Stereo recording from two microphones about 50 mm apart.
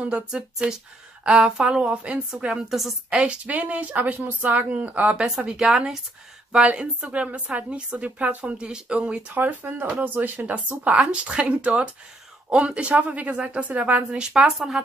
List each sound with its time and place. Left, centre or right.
0.0 s a woman's voice: right
2.5 s a woman's voice: centre
3.3 s speech: right
5.5 s a woman's voice: centre
9.4 s a woman's voice: right; by 14.7 s centre